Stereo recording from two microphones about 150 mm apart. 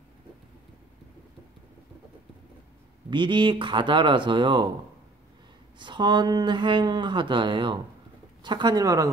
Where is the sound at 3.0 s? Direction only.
30° right (ahead or behind).